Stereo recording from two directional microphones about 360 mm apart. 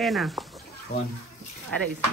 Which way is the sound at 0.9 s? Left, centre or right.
Left.